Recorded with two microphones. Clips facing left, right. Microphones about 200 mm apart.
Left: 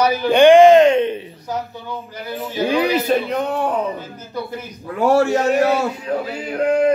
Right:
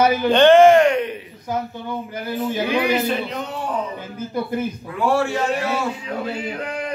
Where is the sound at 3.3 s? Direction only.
55° left (ahead or behind).